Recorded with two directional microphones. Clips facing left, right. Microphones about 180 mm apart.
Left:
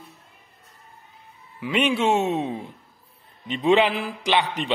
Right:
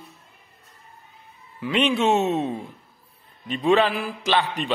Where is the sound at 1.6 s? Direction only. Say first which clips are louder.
Right 1 dB; 10° left (ahead or behind).